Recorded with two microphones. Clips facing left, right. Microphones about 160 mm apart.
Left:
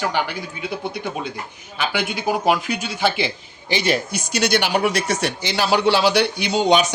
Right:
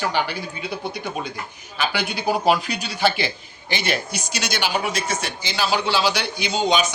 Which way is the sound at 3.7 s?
35° left (ahead or behind).